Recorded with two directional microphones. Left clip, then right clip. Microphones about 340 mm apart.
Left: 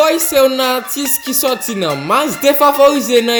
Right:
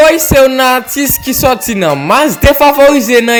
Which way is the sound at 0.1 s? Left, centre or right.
Centre.